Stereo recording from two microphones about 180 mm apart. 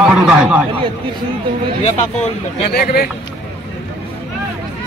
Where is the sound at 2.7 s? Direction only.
60° left (ahead or behind).